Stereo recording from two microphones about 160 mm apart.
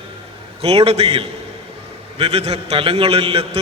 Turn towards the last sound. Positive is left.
turn(degrees=-40)  # may be behind; listen again after turning